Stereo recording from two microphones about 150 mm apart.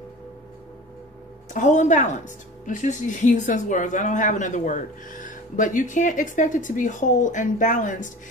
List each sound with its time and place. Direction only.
1.5 s speech: 55° left (ahead or behind)